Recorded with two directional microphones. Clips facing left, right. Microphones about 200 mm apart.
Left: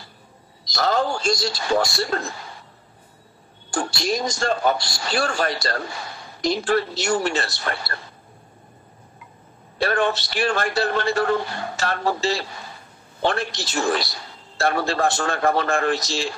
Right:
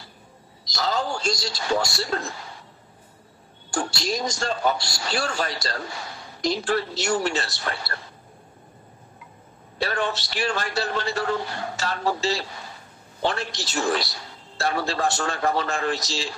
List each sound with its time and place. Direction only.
0.7 s a man's voice: 55° left (ahead or behind)
3.7 s a man's voice: 55° left (ahead or behind)
9.8 s a man's voice: 55° left (ahead or behind)